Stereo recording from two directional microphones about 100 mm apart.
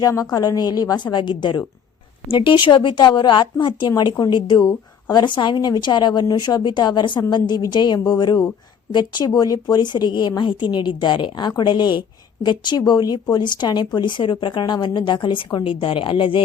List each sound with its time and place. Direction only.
0.0 s a woman's voice: 40° left (ahead or behind); by 16.4 s 60° left (ahead or behind)